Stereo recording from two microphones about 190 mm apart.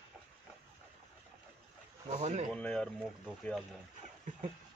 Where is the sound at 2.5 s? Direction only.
5° left (ahead or behind).